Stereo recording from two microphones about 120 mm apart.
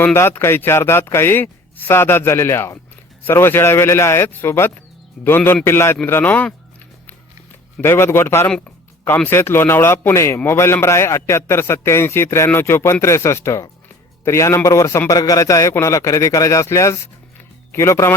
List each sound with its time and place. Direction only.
0.0 s a man's voice: 20° left (ahead or behind)
7.8 s a man's voice: 20° left (ahead or behind)